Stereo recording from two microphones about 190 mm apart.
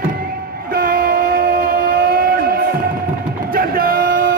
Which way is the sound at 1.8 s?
50° right (ahead or behind).